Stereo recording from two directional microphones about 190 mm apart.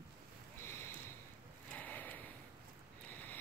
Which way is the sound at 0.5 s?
15° left (ahead or behind).